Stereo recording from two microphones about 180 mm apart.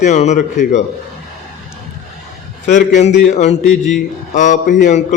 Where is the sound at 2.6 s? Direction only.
45° left (ahead or behind).